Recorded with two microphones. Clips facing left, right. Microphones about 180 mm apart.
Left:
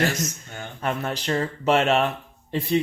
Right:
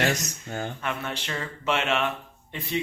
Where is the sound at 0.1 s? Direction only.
40° right (ahead or behind).